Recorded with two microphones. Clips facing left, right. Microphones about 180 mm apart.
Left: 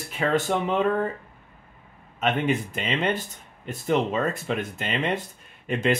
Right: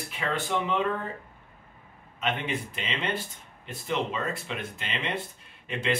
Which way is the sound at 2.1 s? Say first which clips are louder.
Left 7 dB; 45° left (ahead or behind).